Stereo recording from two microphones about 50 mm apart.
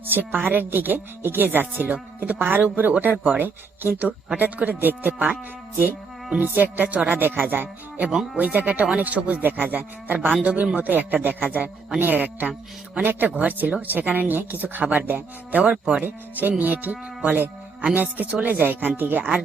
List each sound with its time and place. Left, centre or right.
0.1 s a woman's voice: right
6.4 s a woman's voice: right
15.7 s speech: right
16.0 s a woman's voice: right
17.9 s a woman's voice: right